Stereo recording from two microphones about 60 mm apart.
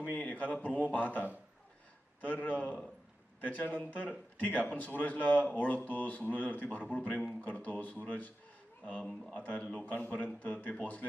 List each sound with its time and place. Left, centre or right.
0.1 s speech: left